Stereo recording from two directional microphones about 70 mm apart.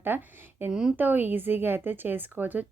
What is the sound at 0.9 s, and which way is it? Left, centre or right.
A woman's voice, right.